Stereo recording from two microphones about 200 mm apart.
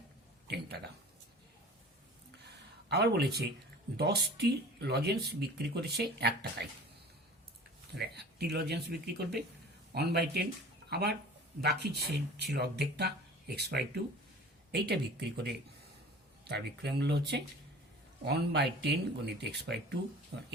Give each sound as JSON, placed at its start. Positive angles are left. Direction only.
{"t": 0.4, "sound": "a sound", "side_deg": -55}
{"t": 2.9, "sound": "speech", "side_deg": -55}
{"t": 7.9, "sound": "speech", "side_deg": -55}